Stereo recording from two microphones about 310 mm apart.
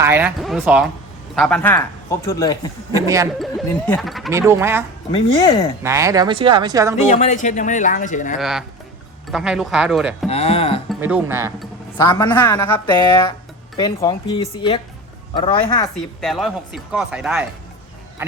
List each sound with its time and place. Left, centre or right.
0.0 s speech: centre
2.9 s speech: centre
3.3 s speech: centre
5.1 s speech: centre
5.8 s speech: centre
7.1 s speech: left
8.4 s speech: centre
10.2 s speech: centre
10.8 s speech: centre
11.9 s speech: centre
16.0 s speech: centre